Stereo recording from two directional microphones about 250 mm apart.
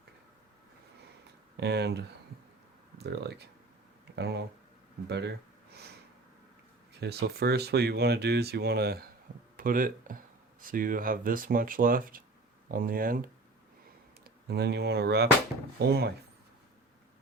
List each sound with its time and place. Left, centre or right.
1.5 s speech: right
7.0 s speech: right